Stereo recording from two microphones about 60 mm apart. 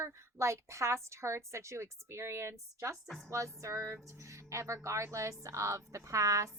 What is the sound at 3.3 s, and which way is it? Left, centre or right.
A woman's voice, right.